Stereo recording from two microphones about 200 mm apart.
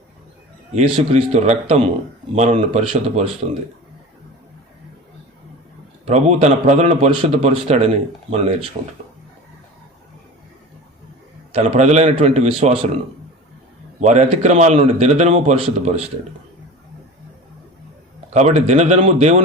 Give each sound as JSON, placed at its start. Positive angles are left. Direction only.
{"t": 0.8, "sound": "a man's voice", "side_deg": -30}
{"t": 6.1, "sound": "a man's voice", "side_deg": -35}
{"t": 11.5, "sound": "a man's voice", "side_deg": -35}
{"t": 14.0, "sound": "a man's voice", "side_deg": -35}
{"t": 18.3, "sound": "a man's voice", "side_deg": -35}